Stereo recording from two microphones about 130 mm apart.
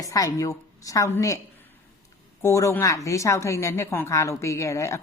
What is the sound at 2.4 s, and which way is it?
Speech, 20° left (ahead or behind).